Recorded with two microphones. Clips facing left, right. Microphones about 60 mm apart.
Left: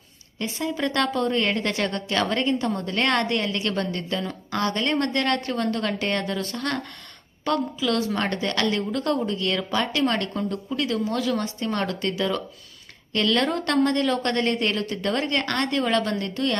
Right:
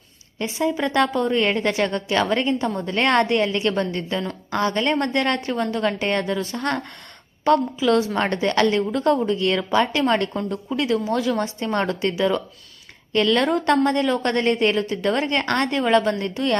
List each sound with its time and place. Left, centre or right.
0.3 s a woman's voice: right
7.8 s a woman's voice: right